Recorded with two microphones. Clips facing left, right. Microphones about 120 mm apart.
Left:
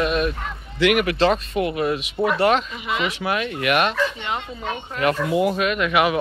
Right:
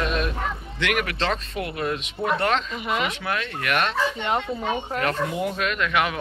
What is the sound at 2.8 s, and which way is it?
Speech, 45° right (ahead or behind).